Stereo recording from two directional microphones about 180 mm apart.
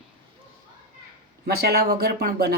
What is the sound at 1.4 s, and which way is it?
Speech, 60° right (ahead or behind).